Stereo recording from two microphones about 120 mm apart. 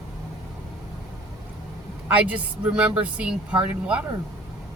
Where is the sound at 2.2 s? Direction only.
10° right (ahead or behind).